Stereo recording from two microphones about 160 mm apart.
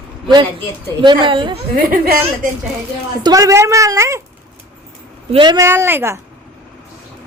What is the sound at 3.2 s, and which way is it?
A woman's voice, 20° right (ahead or behind).